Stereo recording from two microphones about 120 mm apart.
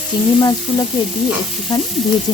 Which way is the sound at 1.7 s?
30° left (ahead or behind).